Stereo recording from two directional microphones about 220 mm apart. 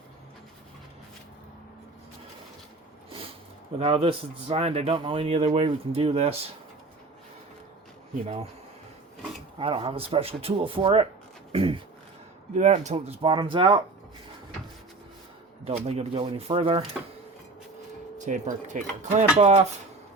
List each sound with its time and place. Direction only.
3.8 s speech: 25° right (ahead or behind)
9.6 s speech: 25° right (ahead or behind)
11.5 s a sound: 25° right (ahead or behind)
12.5 s speech: 30° right (ahead or behind)
15.6 s speech: 30° right (ahead or behind)
18.3 s speech: 35° right (ahead or behind)